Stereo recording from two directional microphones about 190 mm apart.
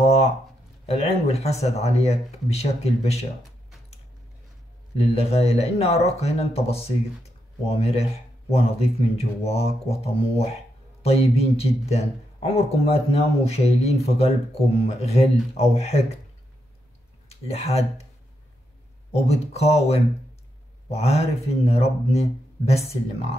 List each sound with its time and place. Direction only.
0.0 s a sound: 35° left (ahead or behind)
0.8 s speech: 35° left (ahead or behind)
4.9 s speech: 30° left (ahead or behind)
17.3 s speech: 35° left (ahead or behind)
19.2 s speech: 35° left (ahead or behind)